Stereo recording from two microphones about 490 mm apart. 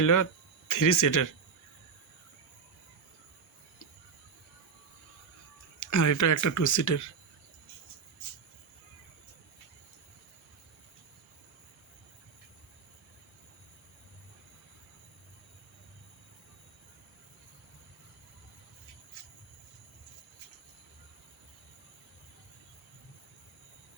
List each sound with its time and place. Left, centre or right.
0.0 s speech: left
5.8 s speech: left